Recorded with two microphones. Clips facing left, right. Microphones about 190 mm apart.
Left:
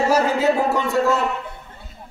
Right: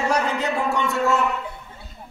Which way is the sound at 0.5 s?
35° left (ahead or behind).